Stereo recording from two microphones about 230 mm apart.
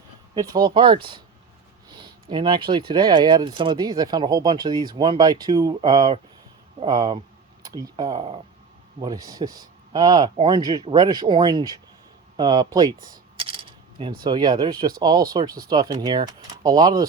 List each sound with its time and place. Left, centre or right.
0.3 s speech: centre
2.3 s speech: right
12.4 s coin: centre
14.3 s speech: centre